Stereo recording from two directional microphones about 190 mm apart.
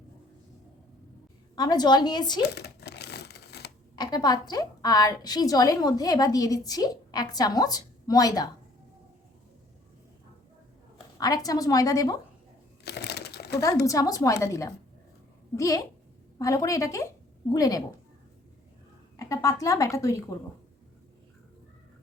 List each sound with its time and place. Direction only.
1.5 s a woman's voice: 20° left (ahead or behind)
2.4 s a sound: 60° left (ahead or behind)
3.9 s a woman's voice: 20° left (ahead or behind)
11.2 s a woman's voice: 20° left (ahead or behind)
12.8 s crumpling: 60° left (ahead or behind)
13.8 s a woman's voice: 20° left (ahead or behind)
19.1 s speech: 15° left (ahead or behind)